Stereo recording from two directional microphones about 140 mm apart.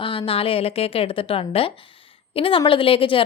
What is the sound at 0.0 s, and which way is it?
Speech, 35° left (ahead or behind).